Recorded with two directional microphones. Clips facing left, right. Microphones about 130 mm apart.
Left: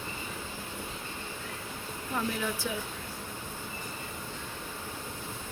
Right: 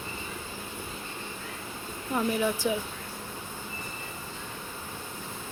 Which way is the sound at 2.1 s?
15° right (ahead or behind).